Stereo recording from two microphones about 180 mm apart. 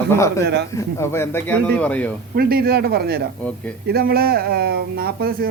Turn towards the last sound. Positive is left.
turn(degrees=-55)  # may be behind; listen again after turning